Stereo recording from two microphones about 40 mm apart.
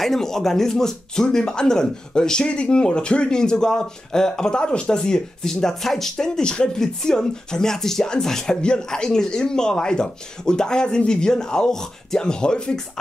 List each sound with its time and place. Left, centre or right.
0.0 s speech: centre
8.5 s speech: left